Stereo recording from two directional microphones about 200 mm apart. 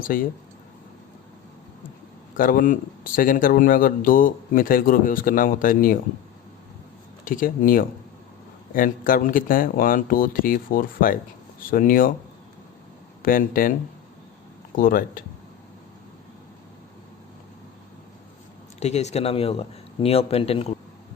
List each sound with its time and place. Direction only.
0.0 s speech: 45° left (ahead or behind)
2.3 s speech: 45° left (ahead or behind)
7.3 s speech: 45° left (ahead or behind)
13.2 s speech: 45° left (ahead or behind)
14.8 s speech: 45° left (ahead or behind)
18.8 s speech: 35° left (ahead or behind)